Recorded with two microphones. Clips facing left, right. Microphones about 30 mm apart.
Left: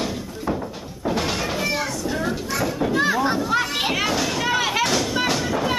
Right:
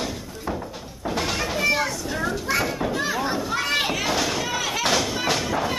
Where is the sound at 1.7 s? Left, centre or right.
Centre.